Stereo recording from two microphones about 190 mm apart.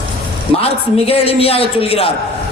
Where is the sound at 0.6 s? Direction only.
30° left (ahead or behind).